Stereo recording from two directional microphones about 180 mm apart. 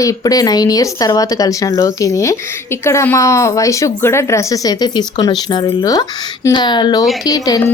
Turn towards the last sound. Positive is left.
turn(degrees=20)  # may be behind; listen again after turning